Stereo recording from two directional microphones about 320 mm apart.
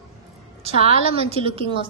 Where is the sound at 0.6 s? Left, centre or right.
Centre.